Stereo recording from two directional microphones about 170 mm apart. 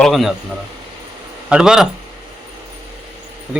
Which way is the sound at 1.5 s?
5° right (ahead or behind).